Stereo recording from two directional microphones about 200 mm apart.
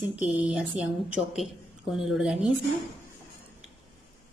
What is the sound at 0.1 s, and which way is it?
A woman's voice, 5° right (ahead or behind).